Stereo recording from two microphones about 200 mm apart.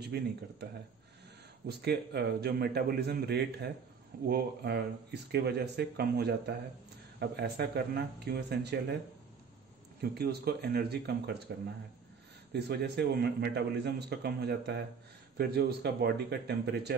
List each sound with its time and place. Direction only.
0.0 s speech: 55° right (ahead or behind)
1.7 s a man's voice: 55° right (ahead or behind)
10.1 s speech: 50° right (ahead or behind)
12.5 s a man's voice: 55° right (ahead or behind)